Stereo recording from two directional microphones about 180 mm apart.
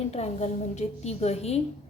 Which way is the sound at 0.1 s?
35° left (ahead or behind).